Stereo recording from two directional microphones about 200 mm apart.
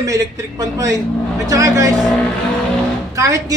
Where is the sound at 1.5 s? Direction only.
15° right (ahead or behind).